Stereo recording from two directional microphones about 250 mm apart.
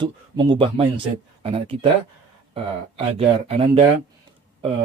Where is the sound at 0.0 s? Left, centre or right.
Centre.